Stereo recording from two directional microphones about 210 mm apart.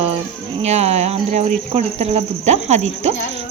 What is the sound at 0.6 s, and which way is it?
Speech, 30° right (ahead or behind).